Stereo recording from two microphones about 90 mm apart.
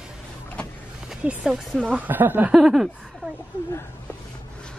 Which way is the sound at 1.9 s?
20° right (ahead or behind).